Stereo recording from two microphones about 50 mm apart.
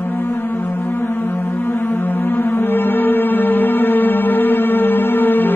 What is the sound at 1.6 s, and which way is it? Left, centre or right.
Music, left.